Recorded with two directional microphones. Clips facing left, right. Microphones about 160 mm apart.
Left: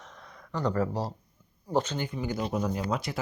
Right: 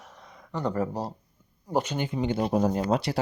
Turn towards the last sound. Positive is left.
turn(degrees=-50)  # may be behind; listen again after turning